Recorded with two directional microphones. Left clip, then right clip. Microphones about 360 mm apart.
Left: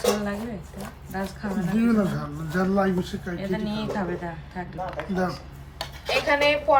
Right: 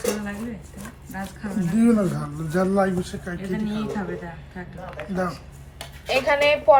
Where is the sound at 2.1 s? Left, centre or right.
Centre.